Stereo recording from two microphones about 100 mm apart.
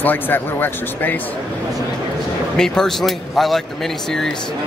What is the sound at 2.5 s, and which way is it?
Speech, 5° left (ahead or behind).